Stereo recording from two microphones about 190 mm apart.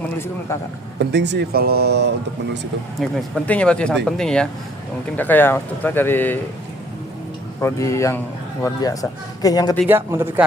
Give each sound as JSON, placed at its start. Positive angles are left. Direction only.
{"t": 0.9, "sound": "speech", "side_deg": -65}
{"t": 3.0, "sound": "speech", "side_deg": 5}
{"t": 7.6, "sound": "speech", "side_deg": 15}
{"t": 9.9, "sound": "a man's voice", "side_deg": -10}